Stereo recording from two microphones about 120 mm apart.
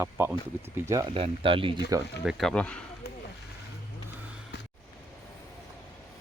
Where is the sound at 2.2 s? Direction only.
Centre (ahead or behind).